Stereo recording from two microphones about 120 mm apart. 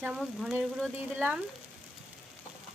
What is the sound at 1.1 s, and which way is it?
Speech, 15° right (ahead or behind).